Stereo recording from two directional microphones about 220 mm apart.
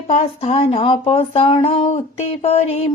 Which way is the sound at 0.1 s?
25° left (ahead or behind).